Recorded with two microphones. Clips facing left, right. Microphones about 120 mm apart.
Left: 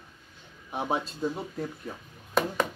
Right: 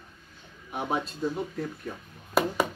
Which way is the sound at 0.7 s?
25° left (ahead or behind).